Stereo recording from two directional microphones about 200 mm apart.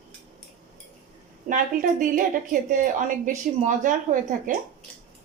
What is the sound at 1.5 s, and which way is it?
Speech, 40° right (ahead or behind).